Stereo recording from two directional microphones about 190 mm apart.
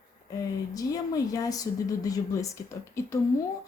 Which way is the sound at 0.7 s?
20° left (ahead or behind).